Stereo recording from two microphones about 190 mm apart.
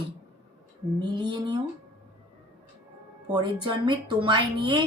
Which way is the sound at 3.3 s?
25° right (ahead or behind).